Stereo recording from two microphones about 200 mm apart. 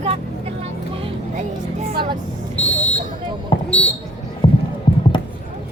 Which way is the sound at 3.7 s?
5° left (ahead or behind).